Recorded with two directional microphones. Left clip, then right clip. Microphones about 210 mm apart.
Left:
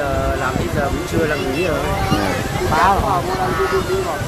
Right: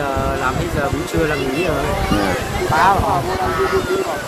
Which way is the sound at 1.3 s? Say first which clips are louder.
Even; 50° right (ahead or behind).